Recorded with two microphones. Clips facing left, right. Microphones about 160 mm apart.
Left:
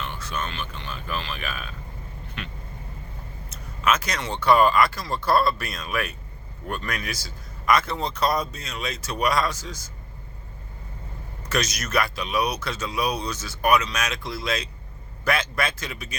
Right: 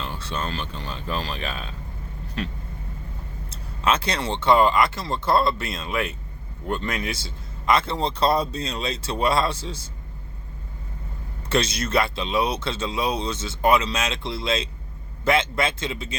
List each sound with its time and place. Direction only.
0.0 s speech: 30° right (ahead or behind)
11.4 s speech: 30° right (ahead or behind)